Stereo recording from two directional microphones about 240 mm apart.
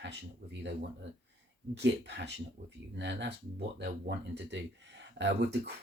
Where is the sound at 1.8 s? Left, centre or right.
Right.